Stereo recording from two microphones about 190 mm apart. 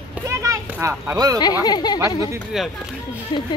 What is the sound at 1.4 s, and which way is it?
Speech, 20° left (ahead or behind).